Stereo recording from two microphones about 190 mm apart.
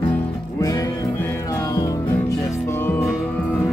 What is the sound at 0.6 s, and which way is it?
Music, 15° left (ahead or behind).